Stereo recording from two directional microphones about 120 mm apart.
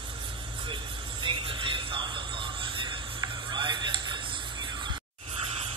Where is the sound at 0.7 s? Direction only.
45° right (ahead or behind).